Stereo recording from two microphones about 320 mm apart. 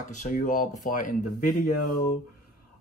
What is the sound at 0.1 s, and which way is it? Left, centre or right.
Speech, left.